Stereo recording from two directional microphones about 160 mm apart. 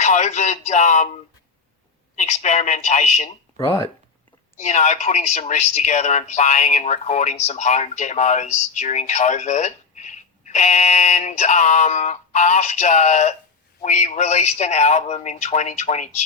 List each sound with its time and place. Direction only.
0.0 s speech: 45° left (ahead or behind)
4.5 s speech: 45° left (ahead or behind)